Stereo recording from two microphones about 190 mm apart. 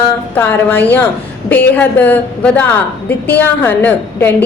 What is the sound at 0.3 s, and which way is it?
A woman's voice, 10° left (ahead or behind).